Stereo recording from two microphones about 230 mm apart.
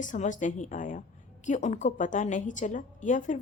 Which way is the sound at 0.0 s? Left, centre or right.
Left.